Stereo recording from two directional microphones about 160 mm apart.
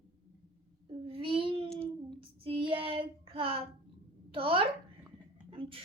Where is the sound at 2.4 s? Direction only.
35° right (ahead or behind).